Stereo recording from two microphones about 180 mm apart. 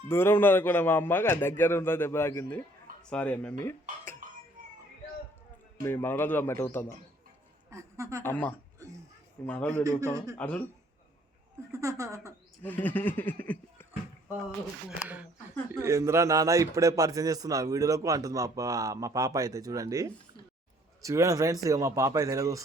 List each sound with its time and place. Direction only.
0.1 s a man's voice: 15° left (ahead or behind)
5.8 s a man's voice: 10° left (ahead or behind)
7.7 s a woman's voice: 15° right (ahead or behind)
8.2 s a man's voice: 10° left (ahead or behind)
8.8 s music: 15° right (ahead or behind)
9.5 s a man's voice: 10° left (ahead or behind)
11.7 s speech: 15° right (ahead or behind)
12.6 s a man's voice: 10° left (ahead or behind)
14.8 s a man's voice: 10° right (ahead or behind)